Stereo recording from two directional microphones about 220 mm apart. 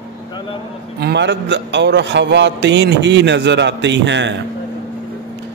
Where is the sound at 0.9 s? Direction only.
50° right (ahead or behind).